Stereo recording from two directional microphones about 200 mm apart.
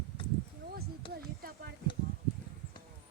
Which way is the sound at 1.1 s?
50° right (ahead or behind).